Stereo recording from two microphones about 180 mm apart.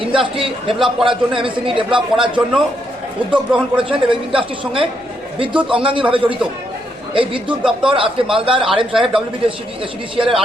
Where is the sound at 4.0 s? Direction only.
30° right (ahead or behind).